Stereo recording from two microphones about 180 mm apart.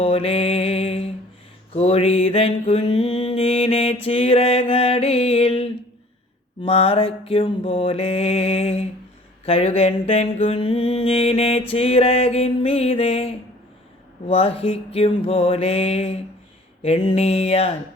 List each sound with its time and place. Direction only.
0.0 s mantra: 35° left (ahead or behind)